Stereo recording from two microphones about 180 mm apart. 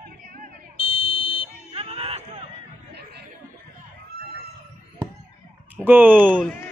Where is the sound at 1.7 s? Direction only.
30° right (ahead or behind).